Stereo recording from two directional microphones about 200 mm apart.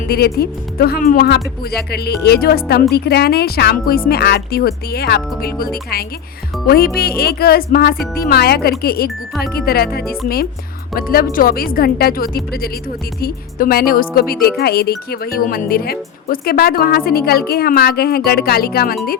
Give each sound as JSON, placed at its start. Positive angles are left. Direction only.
{"t": 0.1, "sound": "speech", "side_deg": 50}
{"t": 6.7, "sound": "speech", "side_deg": 50}